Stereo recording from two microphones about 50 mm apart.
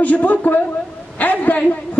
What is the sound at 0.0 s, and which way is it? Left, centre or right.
A woman's voice, left.